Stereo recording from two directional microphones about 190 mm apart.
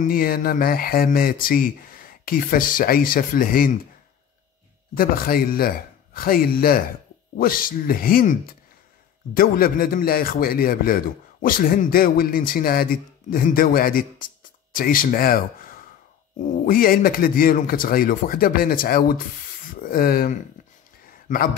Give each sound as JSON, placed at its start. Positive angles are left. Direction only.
{"t": 0.0, "sound": "a man's voice", "side_deg": 50}
{"t": 4.9, "sound": "a man's voice", "side_deg": 50}